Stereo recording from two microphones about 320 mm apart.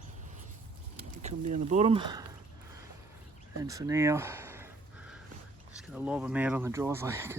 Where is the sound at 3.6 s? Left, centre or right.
Centre.